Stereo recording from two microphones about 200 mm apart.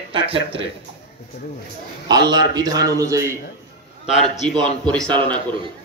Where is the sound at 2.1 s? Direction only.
20° right (ahead or behind).